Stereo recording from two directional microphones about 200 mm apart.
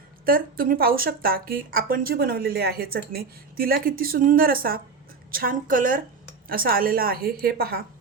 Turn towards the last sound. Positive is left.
turn(degrees=-50)  # may be behind; listen again after turning